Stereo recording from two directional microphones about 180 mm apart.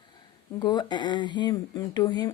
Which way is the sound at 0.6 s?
25° left (ahead or behind).